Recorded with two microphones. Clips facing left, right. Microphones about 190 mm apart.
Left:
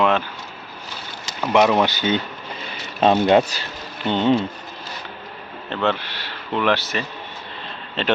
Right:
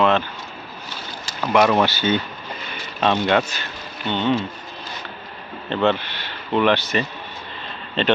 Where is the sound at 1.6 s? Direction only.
15° left (ahead or behind).